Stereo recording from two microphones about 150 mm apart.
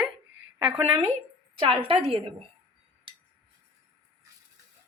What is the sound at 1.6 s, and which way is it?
Speech, 35° right (ahead or behind).